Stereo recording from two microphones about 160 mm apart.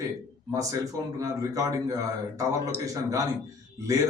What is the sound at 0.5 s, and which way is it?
A man's voice, 20° right (ahead or behind).